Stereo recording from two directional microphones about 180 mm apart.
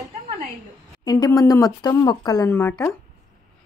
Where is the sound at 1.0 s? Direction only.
20° left (ahead or behind).